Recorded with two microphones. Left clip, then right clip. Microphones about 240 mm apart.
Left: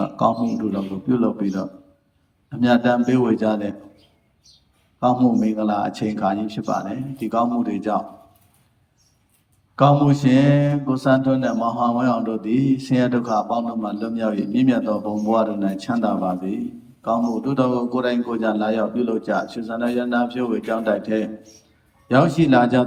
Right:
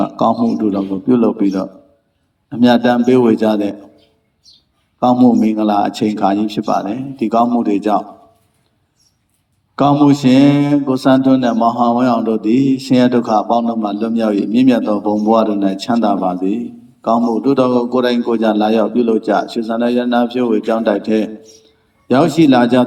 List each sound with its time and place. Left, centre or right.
0.0 s mantra: right
4.9 s mantra: right
9.7 s mantra: right